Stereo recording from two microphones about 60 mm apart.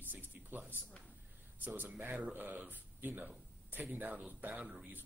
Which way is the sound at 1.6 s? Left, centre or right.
Right.